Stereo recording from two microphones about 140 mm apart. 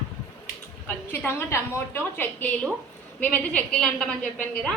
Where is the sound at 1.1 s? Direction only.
15° left (ahead or behind).